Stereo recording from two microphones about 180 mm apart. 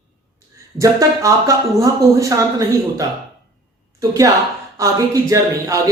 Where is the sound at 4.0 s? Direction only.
20° right (ahead or behind).